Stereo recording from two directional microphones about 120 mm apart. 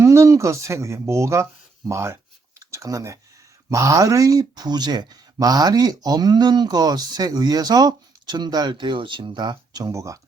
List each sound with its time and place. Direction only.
0.0 s speech: 25° right (ahead or behind)
2.6 s a sound: 25° right (ahead or behind)
3.7 s speech: 25° right (ahead or behind)